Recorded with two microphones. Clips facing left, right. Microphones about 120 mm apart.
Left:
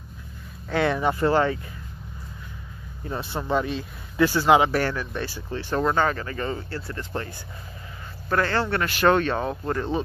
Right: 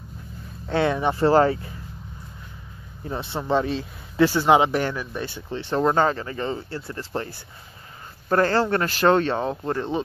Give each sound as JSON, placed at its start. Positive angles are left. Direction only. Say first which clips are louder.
{"t": 0.7, "sound": "speech", "louder": "right 1 dB", "side_deg": -20}
{"t": 1.2, "sound": "speech", "louder": "right 6 dB", "side_deg": -35}
{"t": 3.1, "sound": "speech", "louder": "right 2 dB", "side_deg": -25}